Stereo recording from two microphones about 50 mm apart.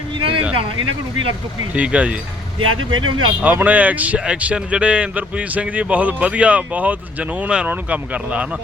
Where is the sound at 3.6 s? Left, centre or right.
Right.